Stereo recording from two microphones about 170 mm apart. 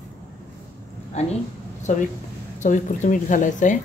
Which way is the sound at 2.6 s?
45° left (ahead or behind).